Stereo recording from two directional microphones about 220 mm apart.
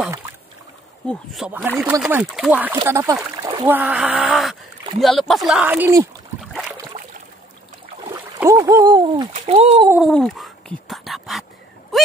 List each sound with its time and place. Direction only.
1.0 s speech: centre (ahead or behind); by 3.7 s 20° right (ahead or behind)
3.7 s speech: 5° right (ahead or behind)
8.1 s speech: 15° right (ahead or behind)
9.3 s a child's voice: 30° right (ahead or behind)
9.8 s cat: centre (ahead or behind)